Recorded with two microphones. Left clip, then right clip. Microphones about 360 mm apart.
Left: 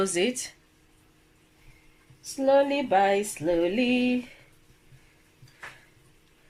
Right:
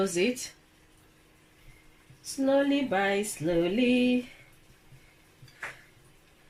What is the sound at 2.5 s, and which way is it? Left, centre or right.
Female singing, left.